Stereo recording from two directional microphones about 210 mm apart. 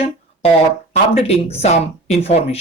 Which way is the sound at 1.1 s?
30° left (ahead or behind).